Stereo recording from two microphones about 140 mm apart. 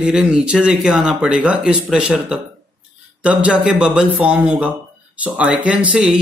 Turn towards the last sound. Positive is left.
turn(degrees=-10)  # may be behind; listen again after turning